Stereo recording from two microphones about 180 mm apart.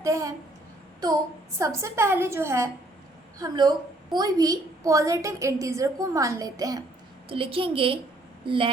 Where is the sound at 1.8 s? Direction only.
15° right (ahead or behind).